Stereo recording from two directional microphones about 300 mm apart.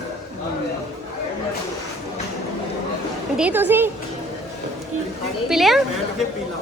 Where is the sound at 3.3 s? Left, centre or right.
Centre.